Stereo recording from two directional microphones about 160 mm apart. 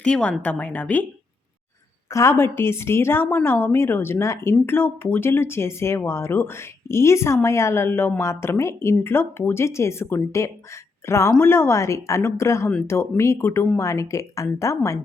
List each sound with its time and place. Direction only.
0.0 s speech: 5° left (ahead or behind)
2.0 s a woman's voice: 15° left (ahead or behind)